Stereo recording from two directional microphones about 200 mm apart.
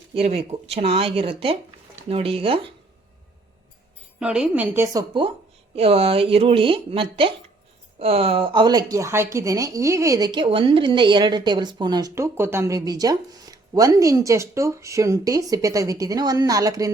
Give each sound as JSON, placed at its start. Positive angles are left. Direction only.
{"t": 0.1, "sound": "speech", "side_deg": -30}
{"t": 4.2, "sound": "speech", "side_deg": -5}